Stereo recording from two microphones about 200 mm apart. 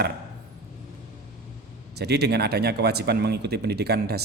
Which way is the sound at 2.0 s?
55° right (ahead or behind).